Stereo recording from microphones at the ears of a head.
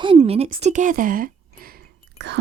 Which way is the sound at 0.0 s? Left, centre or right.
Right.